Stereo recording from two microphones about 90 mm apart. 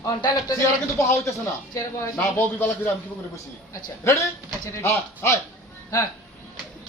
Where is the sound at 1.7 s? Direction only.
40° left (ahead or behind).